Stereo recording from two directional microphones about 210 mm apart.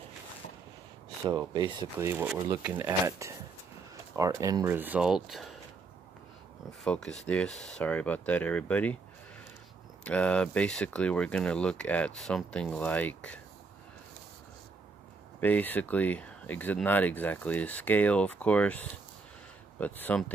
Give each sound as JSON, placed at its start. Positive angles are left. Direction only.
{"t": 1.2, "sound": "speech", "side_deg": -20}
{"t": 6.8, "sound": "speech", "side_deg": 5}
{"t": 10.0, "sound": "speech", "side_deg": 5}
{"t": 15.4, "sound": "speech", "side_deg": 10}
{"t": 19.8, "sound": "speech", "side_deg": 10}